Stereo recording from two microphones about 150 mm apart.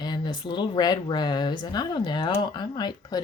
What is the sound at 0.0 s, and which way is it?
Speech, 30° left (ahead or behind).